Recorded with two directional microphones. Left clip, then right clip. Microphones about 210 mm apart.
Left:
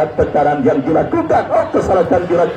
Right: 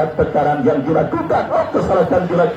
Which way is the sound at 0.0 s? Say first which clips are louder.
Left 2 dB; 45° left (ahead or behind).